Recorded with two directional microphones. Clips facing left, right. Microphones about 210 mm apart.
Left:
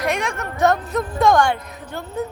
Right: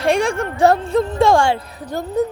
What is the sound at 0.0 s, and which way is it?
A woman's voice, 30° right (ahead or behind).